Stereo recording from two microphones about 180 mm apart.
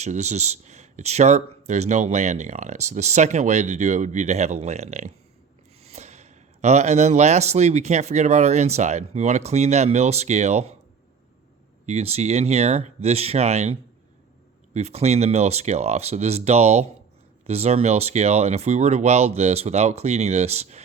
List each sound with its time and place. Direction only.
0.0 s speech: 40° right (ahead or behind)
11.9 s speech: 35° right (ahead or behind)